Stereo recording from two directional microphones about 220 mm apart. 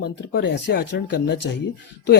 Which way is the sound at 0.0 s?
50° left (ahead or behind).